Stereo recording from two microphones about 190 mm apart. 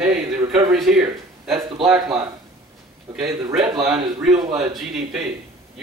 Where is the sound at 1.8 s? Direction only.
5° right (ahead or behind).